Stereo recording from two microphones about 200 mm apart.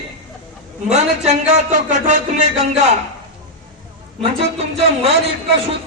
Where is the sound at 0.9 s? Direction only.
35° right (ahead or behind).